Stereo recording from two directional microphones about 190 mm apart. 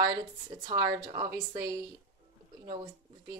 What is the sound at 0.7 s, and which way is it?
Speech, 20° right (ahead or behind).